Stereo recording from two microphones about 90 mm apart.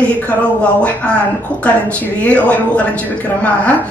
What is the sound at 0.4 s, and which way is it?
Speech, 15° left (ahead or behind).